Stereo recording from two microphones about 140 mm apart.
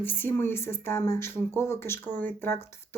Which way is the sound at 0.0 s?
15° left (ahead or behind).